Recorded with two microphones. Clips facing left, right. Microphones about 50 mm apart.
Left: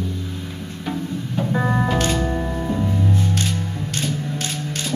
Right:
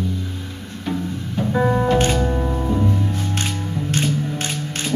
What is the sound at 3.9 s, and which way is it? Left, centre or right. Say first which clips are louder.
Music: right 4 dB; right.